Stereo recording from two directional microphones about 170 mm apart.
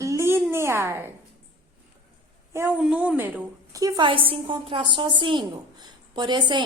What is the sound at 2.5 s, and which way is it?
A woman's voice, 10° right (ahead or behind).